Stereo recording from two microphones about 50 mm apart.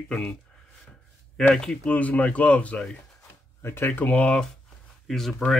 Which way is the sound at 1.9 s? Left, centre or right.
Left.